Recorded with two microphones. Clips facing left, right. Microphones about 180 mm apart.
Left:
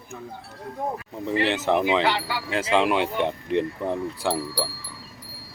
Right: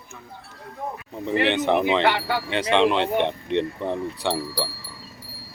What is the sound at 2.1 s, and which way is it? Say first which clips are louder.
Speech: right 3 dB; 55° right (ahead or behind).